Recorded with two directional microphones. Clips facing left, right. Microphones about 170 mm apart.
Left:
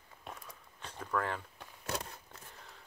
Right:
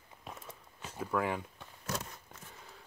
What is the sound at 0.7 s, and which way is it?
Speech, 10° right (ahead or behind).